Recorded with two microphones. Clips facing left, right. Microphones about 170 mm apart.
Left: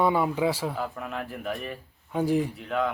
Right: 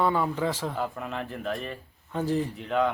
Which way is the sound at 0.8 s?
Centre (ahead or behind).